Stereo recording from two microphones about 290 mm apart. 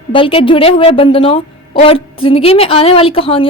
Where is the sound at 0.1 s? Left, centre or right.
Centre.